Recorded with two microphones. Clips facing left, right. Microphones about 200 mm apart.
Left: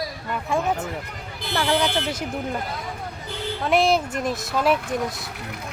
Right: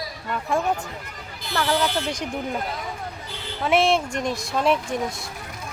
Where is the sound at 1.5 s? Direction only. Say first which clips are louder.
Left 1 dB; 15° left (ahead or behind).